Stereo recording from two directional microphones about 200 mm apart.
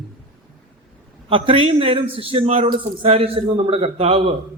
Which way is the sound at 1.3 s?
25° right (ahead or behind).